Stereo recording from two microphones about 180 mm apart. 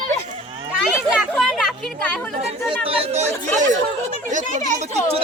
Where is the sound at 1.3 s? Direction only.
Centre (ahead or behind).